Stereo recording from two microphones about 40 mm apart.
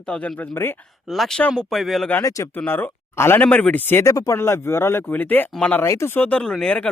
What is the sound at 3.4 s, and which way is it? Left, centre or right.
Speech, left.